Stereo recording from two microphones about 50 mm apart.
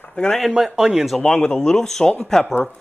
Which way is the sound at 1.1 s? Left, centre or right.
Centre.